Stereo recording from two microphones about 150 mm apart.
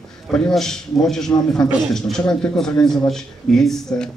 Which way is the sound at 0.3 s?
5° left (ahead or behind).